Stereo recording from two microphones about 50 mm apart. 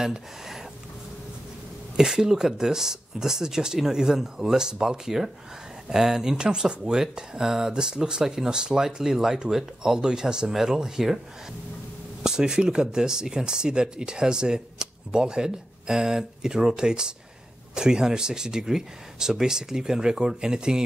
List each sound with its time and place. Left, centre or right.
0.0 s speech: centre
2.0 s speech: centre
12.2 s speech: centre